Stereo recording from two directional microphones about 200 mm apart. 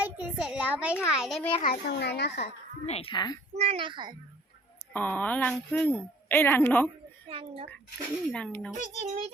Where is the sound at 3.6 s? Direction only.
30° right (ahead or behind).